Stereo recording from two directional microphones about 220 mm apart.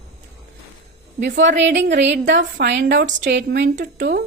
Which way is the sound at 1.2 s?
55° right (ahead or behind).